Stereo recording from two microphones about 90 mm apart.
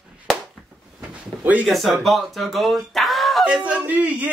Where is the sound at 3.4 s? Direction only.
15° right (ahead or behind).